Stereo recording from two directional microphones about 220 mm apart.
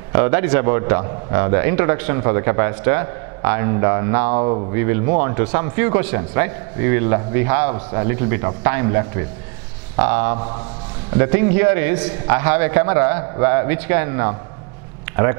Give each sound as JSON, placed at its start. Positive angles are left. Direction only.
{"t": 0.1, "sound": "a man's voice", "side_deg": -15}
{"t": 4.3, "sound": "speech", "side_deg": -30}
{"t": 4.7, "sound": "a man's voice", "side_deg": -15}